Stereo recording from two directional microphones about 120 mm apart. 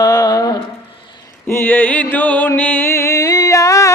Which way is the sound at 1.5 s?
20° left (ahead or behind).